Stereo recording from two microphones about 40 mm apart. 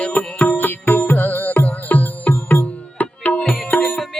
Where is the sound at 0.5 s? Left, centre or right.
Left.